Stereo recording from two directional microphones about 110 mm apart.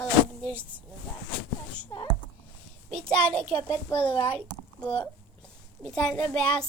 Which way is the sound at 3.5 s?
15° left (ahead or behind).